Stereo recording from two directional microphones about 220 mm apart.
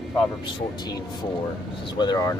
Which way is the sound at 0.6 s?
20° left (ahead or behind).